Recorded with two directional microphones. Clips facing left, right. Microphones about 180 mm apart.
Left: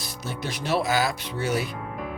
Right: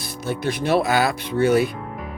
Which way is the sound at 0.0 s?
55° right (ahead or behind).